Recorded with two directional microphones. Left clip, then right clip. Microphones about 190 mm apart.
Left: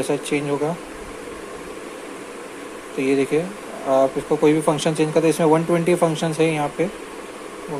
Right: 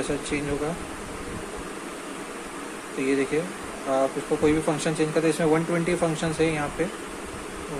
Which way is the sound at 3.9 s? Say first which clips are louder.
Left 6 dB; 25° left (ahead or behind).